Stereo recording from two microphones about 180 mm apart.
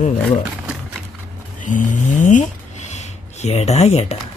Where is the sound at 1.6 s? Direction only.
45° left (ahead or behind).